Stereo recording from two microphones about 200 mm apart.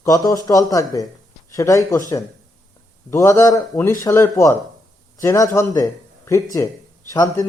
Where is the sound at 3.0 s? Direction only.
15° left (ahead or behind).